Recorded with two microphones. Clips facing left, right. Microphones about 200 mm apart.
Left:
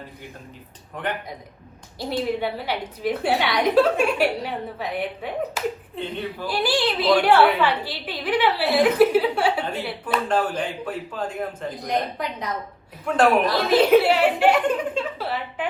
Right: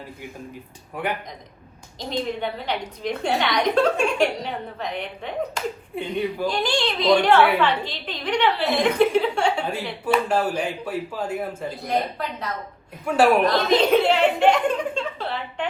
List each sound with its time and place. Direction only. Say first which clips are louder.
1.0 s speech: right 1 dB; 10° right (ahead or behind)
2.0 s a woman's voice: left 2 dB; 10° left (ahead or behind)
5.9 s speech: right 1 dB; 10° right (ahead or behind)
6.5 s a woman's voice: left 1 dB; 5° left (ahead or behind)
10.1 s speech: right 2 dB; 10° right (ahead or behind)
11.9 s a woman's voice: even; 15° left (ahead or behind)
13.1 s speech: right 1 dB; 5° right (ahead or behind)
13.5 s a sound: left 2 dB; 5° left (ahead or behind)